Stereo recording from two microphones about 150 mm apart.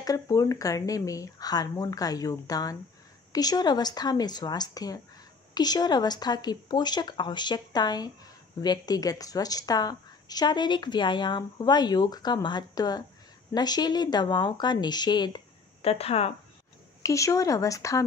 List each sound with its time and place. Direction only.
0.0 s a woman's voice: 25° left (ahead or behind)
15.8 s speech: 45° left (ahead or behind)
17.0 s a woman's voice: 20° left (ahead or behind)